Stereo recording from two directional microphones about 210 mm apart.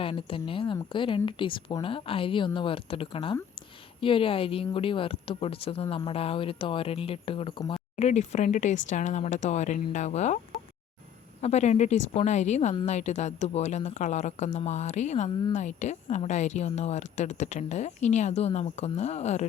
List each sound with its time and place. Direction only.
0.0 s a woman's voice: 25° left (ahead or behind)